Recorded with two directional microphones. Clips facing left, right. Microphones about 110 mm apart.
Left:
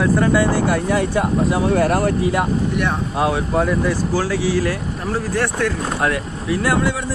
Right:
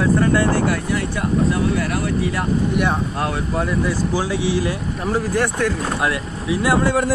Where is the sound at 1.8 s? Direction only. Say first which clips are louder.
Left 5 dB; 45° left (ahead or behind).